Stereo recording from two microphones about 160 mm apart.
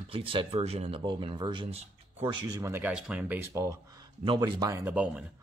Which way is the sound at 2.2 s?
25° right (ahead or behind).